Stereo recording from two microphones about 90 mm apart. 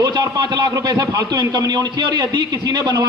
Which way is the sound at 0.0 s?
50° right (ahead or behind).